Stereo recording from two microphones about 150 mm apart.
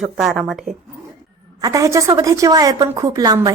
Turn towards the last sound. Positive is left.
turn(degrees=-25)  # may be behind; listen again after turning